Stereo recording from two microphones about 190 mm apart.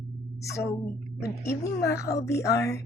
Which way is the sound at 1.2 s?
15° left (ahead or behind).